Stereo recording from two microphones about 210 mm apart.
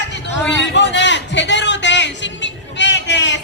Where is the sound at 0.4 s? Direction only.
55° left (ahead or behind).